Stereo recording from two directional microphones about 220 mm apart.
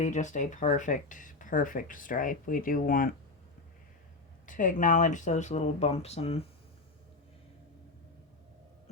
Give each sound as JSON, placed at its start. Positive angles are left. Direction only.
{"t": 0.0, "sound": "speech", "side_deg": 35}
{"t": 4.4, "sound": "speech", "side_deg": 35}